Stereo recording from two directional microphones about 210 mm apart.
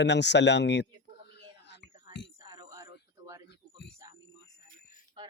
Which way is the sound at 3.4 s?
55° left (ahead or behind).